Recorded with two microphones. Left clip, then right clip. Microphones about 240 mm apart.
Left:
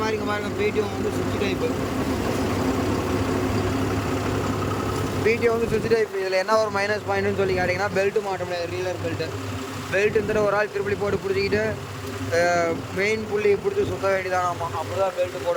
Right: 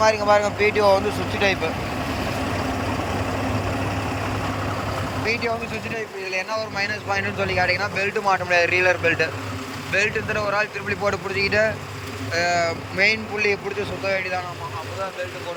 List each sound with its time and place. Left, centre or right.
0.0 s speech: centre
5.2 s speech: centre
6.3 s speech: left
6.7 s speech: centre